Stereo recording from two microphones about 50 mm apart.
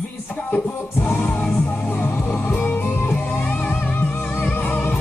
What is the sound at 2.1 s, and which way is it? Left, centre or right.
Music, left.